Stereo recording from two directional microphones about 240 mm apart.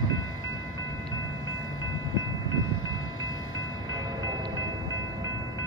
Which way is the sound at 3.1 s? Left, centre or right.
Left.